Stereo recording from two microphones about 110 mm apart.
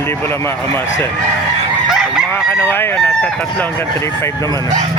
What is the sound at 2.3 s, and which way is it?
Fowl, 20° left (ahead or behind).